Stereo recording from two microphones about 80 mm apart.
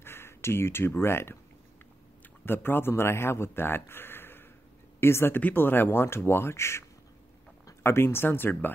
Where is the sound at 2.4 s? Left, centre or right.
Left.